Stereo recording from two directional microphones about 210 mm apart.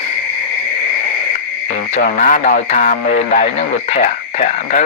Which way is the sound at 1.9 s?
40° left (ahead or behind).